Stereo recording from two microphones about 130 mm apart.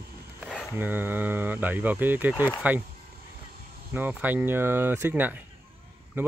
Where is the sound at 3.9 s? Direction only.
15° right (ahead or behind).